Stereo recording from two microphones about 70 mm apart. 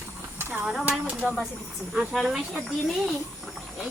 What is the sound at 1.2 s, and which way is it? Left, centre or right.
Speech, centre.